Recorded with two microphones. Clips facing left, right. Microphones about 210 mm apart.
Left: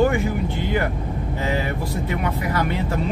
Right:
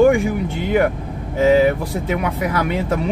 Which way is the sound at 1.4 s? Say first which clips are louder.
Right 12 dB; 90° right.